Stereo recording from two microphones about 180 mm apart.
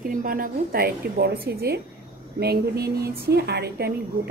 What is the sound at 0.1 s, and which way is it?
A woman's voice, 50° right (ahead or behind).